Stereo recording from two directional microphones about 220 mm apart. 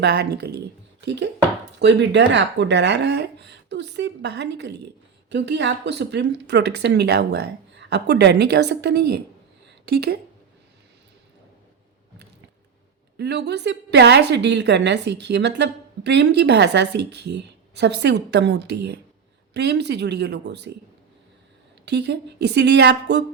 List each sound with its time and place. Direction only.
0.0 s a woman's voice: 50° right (ahead or behind)
13.1 s a woman's voice: 50° right (ahead or behind)
21.8 s a woman's voice: 50° right (ahead or behind)